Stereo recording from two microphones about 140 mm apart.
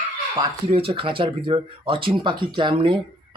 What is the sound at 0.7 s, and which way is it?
Speech, 40° right (ahead or behind).